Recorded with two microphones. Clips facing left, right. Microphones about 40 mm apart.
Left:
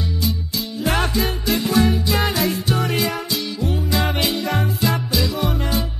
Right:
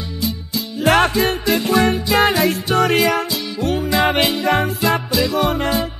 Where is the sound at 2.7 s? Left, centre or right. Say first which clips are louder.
Right 6 dB; right.